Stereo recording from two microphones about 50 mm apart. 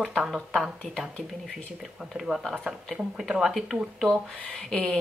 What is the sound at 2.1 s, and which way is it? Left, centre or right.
Speech, centre.